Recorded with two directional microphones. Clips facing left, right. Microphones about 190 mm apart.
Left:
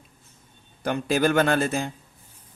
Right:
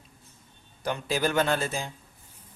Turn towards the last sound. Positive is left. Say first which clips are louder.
# left 5 dB
turn(degrees=55)  # may be behind; listen again after turning